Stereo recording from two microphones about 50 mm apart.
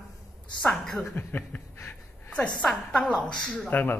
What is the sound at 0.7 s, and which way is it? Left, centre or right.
Speech, centre.